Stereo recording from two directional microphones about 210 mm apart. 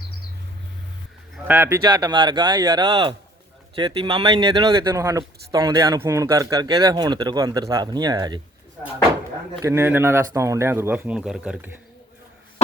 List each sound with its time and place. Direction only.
1.5 s speech: 10° right (ahead or behind)
9.6 s speech: 10° right (ahead or behind)